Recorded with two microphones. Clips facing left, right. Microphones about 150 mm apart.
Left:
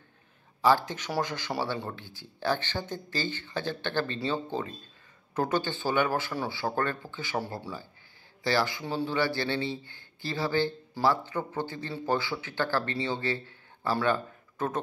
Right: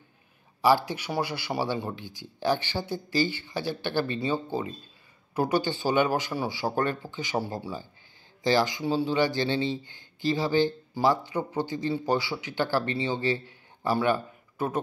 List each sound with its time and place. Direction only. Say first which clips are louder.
0.6 s speech: right 2 dB; 10° right (ahead or behind)